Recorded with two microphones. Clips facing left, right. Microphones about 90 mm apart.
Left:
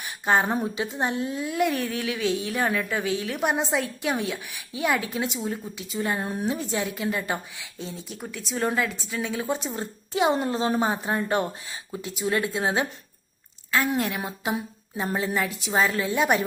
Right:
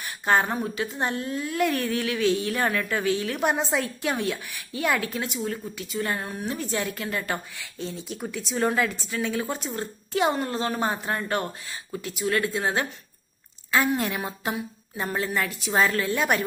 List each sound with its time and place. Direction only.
0.0 s a sound: 10° left (ahead or behind)
0.6 s a woman's voice: 10° left (ahead or behind)
9.5 s a woman's voice: 15° left (ahead or behind)
13.7 s a woman's voice: 5° right (ahead or behind); by 16.4 s 15° left (ahead or behind)